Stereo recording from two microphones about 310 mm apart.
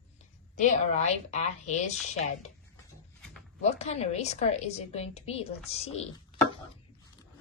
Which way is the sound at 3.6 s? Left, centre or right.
Left.